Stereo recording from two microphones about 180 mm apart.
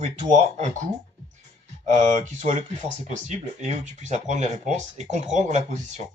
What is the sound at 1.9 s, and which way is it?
Speech, 40° right (ahead or behind).